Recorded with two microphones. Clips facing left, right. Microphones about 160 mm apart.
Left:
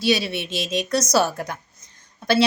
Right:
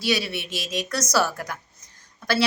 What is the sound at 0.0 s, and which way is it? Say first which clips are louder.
A woman's voice: left 4 dB; 25° left (ahead or behind).